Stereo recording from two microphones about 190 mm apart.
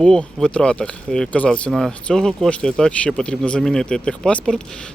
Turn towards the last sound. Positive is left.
turn(degrees=5)  # may be behind; listen again after turning